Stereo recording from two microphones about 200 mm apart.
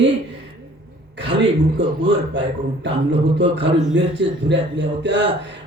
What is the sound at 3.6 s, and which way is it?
Speech, 60° right (ahead or behind).